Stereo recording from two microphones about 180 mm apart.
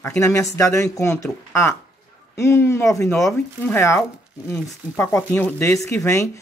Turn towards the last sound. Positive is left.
turn(degrees=15)  # may be behind; listen again after turning